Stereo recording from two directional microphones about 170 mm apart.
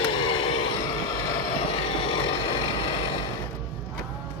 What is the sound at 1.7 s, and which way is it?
Vehicle, 35° left (ahead or behind).